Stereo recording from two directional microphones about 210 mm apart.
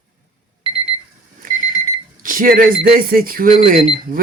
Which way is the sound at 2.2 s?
40° right (ahead or behind).